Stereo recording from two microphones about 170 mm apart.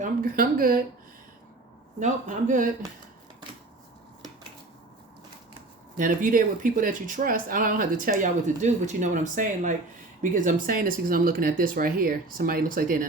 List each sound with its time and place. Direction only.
0.0 s speech: 55° right (ahead or behind)
2.0 s speech: 50° right (ahead or behind)
6.0 s speech: 50° right (ahead or behind)